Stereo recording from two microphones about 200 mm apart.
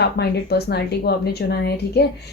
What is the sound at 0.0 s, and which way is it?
A woman's voice, 55° left (ahead or behind).